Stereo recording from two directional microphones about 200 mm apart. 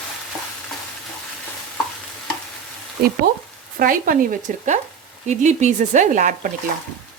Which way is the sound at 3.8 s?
45° right (ahead or behind).